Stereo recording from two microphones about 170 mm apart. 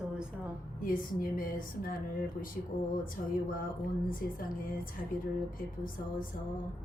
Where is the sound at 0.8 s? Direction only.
55° left (ahead or behind).